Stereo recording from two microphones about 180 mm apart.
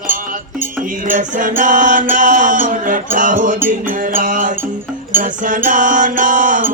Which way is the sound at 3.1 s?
45° right (ahead or behind).